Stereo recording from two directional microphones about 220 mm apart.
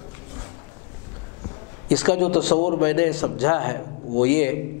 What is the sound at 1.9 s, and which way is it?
A man's voice, 10° left (ahead or behind).